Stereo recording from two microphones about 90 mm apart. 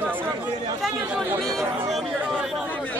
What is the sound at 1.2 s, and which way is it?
Speech, 5° left (ahead or behind).